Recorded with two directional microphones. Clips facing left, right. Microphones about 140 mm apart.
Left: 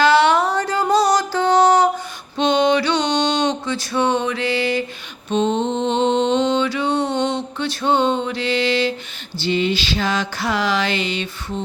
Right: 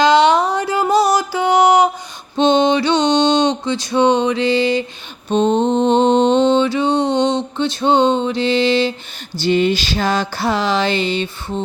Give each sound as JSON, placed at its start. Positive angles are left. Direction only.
{"t": 0.0, "sound": "music", "side_deg": -15}
{"t": 2.3, "sound": "mantra", "side_deg": -25}
{"t": 5.3, "sound": "mantra", "side_deg": -40}
{"t": 9.4, "sound": "a sound", "side_deg": -50}